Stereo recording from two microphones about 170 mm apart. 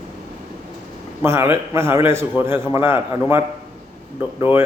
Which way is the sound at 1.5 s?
15° right (ahead or behind).